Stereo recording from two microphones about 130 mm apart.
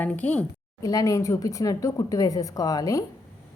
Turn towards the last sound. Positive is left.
turn(degrees=25)  # may be behind; listen again after turning